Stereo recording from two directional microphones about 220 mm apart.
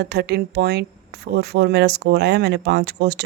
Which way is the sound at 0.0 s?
50° right (ahead or behind).